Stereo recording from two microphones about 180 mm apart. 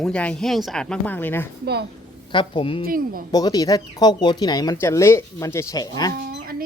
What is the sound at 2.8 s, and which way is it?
Speech, 55° right (ahead or behind).